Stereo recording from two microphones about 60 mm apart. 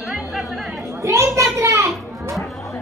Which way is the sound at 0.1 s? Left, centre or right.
Centre.